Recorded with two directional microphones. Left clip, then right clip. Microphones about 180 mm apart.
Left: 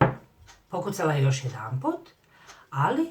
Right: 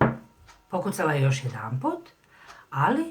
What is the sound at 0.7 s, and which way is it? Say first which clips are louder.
Speech: right 1 dB; 45° right (ahead or behind).